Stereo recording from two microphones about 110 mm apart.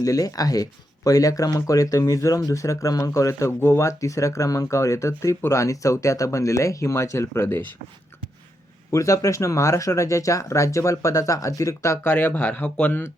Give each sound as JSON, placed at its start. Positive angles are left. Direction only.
{"t": 0.0, "sound": "speech", "side_deg": 30}
{"t": 8.9, "sound": "speech", "side_deg": 30}